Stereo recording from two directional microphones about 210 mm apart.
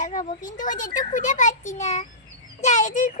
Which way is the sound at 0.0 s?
40° left (ahead or behind).